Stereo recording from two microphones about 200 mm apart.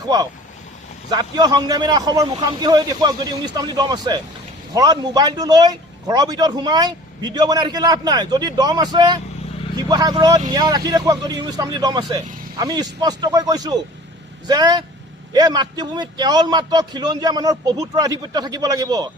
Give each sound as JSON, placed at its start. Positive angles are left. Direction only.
{"t": 0.1, "sound": "speech", "side_deg": -20}